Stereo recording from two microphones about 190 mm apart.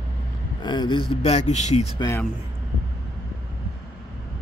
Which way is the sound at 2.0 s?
15° left (ahead or behind).